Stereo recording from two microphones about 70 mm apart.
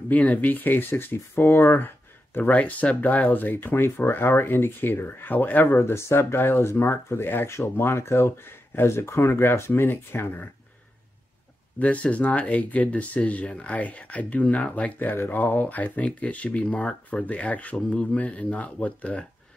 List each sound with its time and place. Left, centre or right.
0.1 s speech: left
2.3 s speech: left
5.8 s speech: left
11.8 s speech: centre